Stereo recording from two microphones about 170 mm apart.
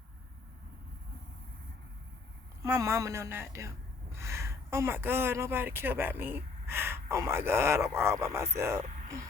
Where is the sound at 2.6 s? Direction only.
15° right (ahead or behind).